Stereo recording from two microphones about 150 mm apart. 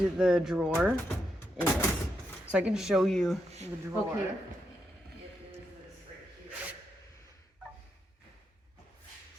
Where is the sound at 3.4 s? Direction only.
45° right (ahead or behind).